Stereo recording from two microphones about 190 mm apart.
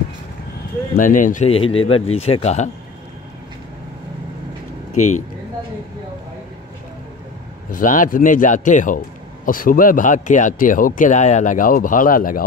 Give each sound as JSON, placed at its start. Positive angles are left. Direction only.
{"t": 0.9, "sound": "speech", "side_deg": 45}
{"t": 1.5, "sound": "speech", "side_deg": 30}
{"t": 7.7, "sound": "speech", "side_deg": 45}